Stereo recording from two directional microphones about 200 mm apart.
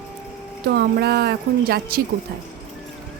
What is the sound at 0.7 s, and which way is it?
A woman's voice, 55° right (ahead or behind).